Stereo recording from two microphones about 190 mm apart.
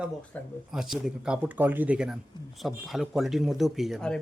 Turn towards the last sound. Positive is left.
turn(degrees=0)  # may be behind; listen again after turning